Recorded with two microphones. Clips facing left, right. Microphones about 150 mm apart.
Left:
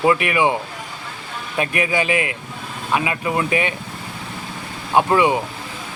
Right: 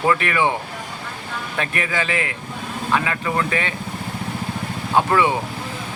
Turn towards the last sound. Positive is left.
turn(degrees=15)  # may be behind; listen again after turning